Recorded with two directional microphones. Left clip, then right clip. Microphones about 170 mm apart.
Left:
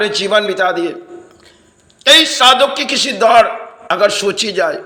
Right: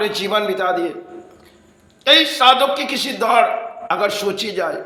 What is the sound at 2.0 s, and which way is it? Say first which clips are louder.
A man's voice: left 4 dB; 20° left (ahead or behind).